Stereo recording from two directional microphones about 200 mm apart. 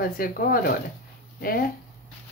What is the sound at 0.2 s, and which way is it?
Speech, 50° left (ahead or behind).